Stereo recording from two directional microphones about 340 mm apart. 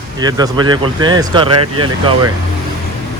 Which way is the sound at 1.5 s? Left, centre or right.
Right.